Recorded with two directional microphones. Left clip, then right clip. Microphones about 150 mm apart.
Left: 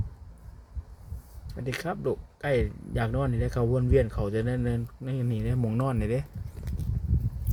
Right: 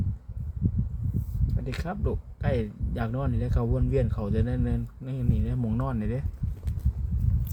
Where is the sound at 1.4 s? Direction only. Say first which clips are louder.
Left 4 dB; 20° left (ahead or behind).